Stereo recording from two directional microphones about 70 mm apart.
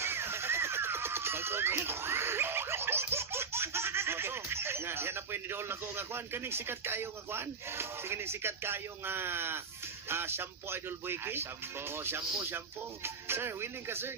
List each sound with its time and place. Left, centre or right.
0.0 s music: right